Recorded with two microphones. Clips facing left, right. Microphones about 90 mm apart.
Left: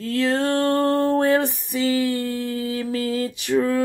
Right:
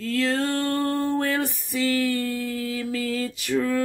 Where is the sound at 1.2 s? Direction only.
20° left (ahead or behind).